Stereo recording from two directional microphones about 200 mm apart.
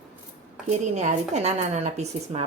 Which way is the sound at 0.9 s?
35° right (ahead or behind).